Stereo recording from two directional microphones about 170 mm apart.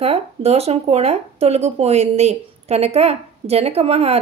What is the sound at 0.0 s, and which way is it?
Speech, 35° right (ahead or behind).